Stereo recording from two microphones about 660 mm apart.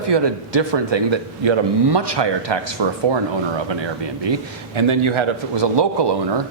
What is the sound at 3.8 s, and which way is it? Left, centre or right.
A man's voice, right.